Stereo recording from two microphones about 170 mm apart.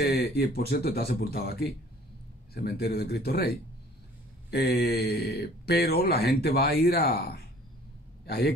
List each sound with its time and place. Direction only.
0.0 s speech: 75° left (ahead or behind)